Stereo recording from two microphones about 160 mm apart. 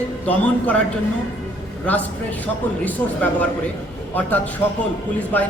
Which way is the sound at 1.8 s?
10° left (ahead or behind).